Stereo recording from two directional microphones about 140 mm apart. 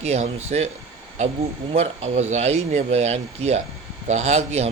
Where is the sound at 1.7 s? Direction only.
50° right (ahead or behind).